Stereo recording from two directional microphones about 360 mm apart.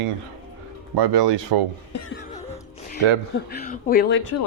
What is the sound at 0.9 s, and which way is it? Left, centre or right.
Speech, right.